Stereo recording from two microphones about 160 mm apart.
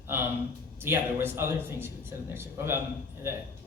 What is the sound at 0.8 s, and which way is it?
A man's voice, 15° right (ahead or behind).